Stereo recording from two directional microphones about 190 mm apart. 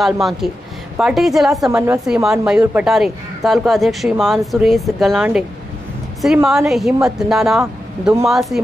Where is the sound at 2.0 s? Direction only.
Centre (ahead or behind).